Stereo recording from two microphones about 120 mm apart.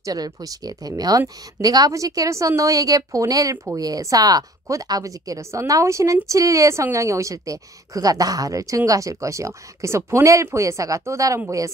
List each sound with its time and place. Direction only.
0.0 s a woman's voice: 30° right (ahead or behind)